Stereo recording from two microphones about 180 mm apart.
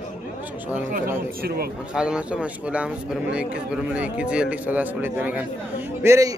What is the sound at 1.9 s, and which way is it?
A man's voice, 5° right (ahead or behind).